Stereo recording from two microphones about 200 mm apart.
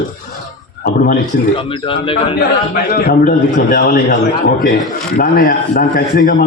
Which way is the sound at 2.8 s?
50° left (ahead or behind).